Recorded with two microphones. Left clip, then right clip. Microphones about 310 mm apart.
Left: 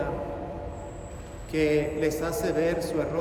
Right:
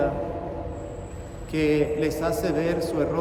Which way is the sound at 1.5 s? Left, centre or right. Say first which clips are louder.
Right 2 dB; centre.